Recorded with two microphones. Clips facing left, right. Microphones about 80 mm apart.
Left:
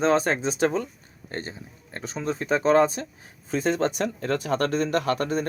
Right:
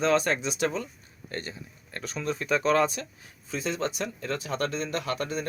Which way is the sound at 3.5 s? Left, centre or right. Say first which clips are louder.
Left 6 dB; left.